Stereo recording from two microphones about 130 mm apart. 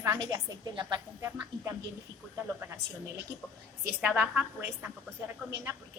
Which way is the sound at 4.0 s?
5° right (ahead or behind).